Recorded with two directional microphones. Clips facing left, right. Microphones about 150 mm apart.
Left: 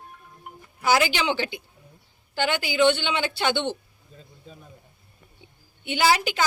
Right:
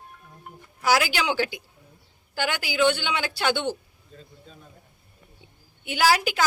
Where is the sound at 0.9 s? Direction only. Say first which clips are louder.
Left 1 dB; 5° right (ahead or behind).